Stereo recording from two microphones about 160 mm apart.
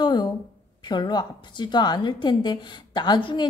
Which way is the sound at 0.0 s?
25° left (ahead or behind).